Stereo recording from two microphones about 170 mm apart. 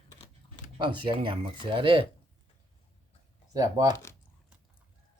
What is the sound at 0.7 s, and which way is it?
Speech, 25° right (ahead or behind).